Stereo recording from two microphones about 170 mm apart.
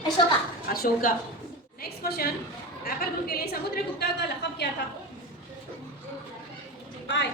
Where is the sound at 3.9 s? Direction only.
75° left (ahead or behind).